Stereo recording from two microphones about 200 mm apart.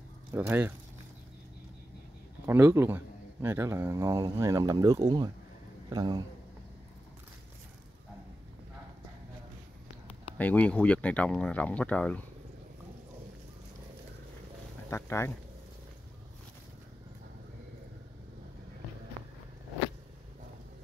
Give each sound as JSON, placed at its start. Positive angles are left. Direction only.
{"t": 0.3, "sound": "speech", "side_deg": -10}
{"t": 2.4, "sound": "a man's voice", "side_deg": -10}
{"t": 10.3, "sound": "speech", "side_deg": 5}
{"t": 14.9, "sound": "speech", "side_deg": 15}